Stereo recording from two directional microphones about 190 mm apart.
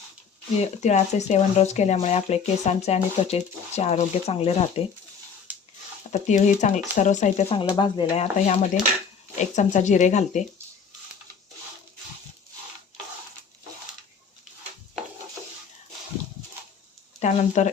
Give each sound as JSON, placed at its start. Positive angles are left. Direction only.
{"t": 0.6, "sound": "speech", "side_deg": 35}
{"t": 6.1, "sound": "speech", "side_deg": 40}
{"t": 7.5, "sound": "speech", "side_deg": 25}
{"t": 17.2, "sound": "speech", "side_deg": 40}